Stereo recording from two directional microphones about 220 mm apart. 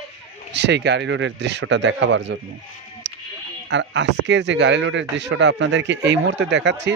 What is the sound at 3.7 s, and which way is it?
Speech, 55° right (ahead or behind).